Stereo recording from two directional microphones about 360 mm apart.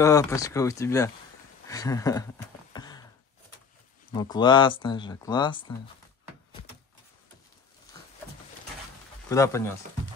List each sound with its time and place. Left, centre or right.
0.0 s speech: centre
1.7 s a sound: centre
4.1 s speech: centre
9.3 s speech: centre